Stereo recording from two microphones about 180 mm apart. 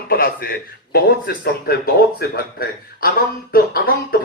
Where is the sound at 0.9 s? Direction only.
55° left (ahead or behind).